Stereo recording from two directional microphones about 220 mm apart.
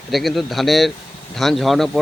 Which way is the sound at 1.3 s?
Centre (ahead or behind).